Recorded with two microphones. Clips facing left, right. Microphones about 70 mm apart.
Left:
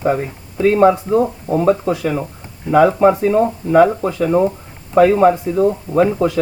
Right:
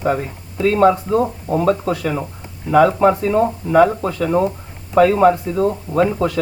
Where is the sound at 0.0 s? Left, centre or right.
Centre.